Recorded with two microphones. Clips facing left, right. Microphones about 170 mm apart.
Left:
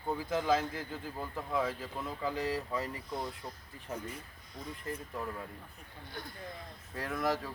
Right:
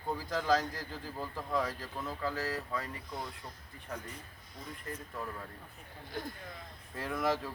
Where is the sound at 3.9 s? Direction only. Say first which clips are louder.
Left 2 dB; 25° left (ahead or behind).